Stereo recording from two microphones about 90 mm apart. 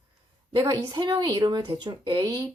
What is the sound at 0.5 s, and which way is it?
A woman's voice, 50° right (ahead or behind).